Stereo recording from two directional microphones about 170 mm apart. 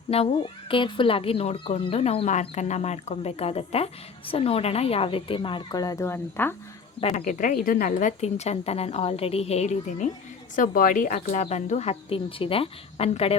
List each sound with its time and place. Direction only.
0.1 s a woman's voice: 35° left (ahead or behind); by 6.6 s 10° left (ahead or behind)
7.0 s a woman's voice: 45° left (ahead or behind)